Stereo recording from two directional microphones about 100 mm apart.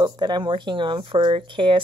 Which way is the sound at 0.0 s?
45° right (ahead or behind).